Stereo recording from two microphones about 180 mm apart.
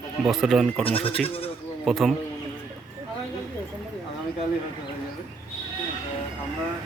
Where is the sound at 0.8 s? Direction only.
30° left (ahead or behind).